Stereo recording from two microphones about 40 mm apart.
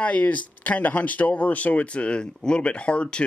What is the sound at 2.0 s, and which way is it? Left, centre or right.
Speech, left.